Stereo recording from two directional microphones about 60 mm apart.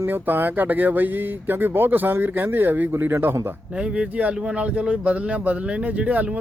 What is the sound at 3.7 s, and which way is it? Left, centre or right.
Speech, centre.